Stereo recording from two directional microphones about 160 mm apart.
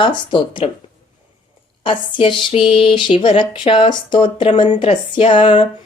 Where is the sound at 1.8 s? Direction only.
30° left (ahead or behind).